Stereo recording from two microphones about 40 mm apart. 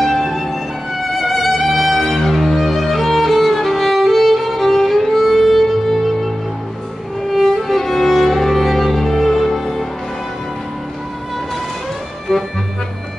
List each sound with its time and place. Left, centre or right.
0.0 s music: centre
12.3 s music: centre